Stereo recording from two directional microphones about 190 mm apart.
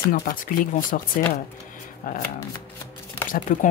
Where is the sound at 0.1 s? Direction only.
45° left (ahead or behind).